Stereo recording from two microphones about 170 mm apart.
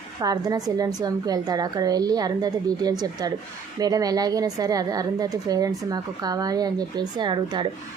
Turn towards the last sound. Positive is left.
turn(degrees=-25)  # may be behind; listen again after turning